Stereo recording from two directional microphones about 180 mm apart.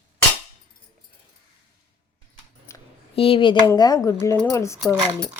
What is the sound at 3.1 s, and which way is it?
Speech, 30° left (ahead or behind).